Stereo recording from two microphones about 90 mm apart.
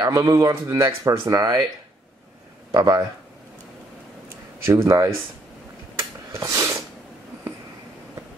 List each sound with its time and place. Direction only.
0.2 s speech: 35° right (ahead or behind)
2.7 s speech: 50° right (ahead or behind)
4.6 s speech: 35° right (ahead or behind)
5.9 s a sound: 35° right (ahead or behind)